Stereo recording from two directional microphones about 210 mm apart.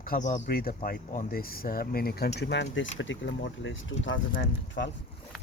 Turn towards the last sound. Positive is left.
turn(degrees=65)  # may be behind; listen again after turning